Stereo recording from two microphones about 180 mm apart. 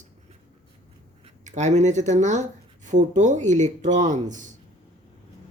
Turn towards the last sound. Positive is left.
turn(degrees=-45)  # may be behind; listen again after turning